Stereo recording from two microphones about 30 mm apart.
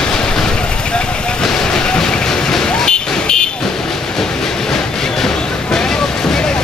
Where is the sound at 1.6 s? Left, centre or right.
Left.